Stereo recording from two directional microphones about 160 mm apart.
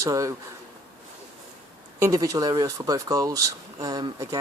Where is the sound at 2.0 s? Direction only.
20° right (ahead or behind).